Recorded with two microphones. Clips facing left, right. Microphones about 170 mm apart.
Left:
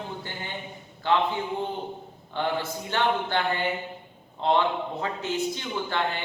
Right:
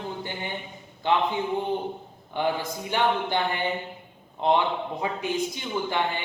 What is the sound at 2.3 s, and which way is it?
A man's voice, 15° right (ahead or behind).